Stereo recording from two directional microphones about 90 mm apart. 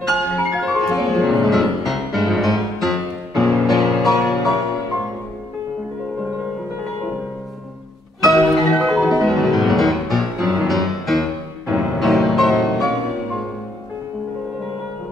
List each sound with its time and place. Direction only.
0.0 s music: centre (ahead or behind)
8.2 s marimba: centre (ahead or behind)
9.2 s music: centre (ahead or behind)